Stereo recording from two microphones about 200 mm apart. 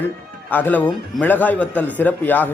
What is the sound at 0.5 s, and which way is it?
A man's voice, 10° left (ahead or behind).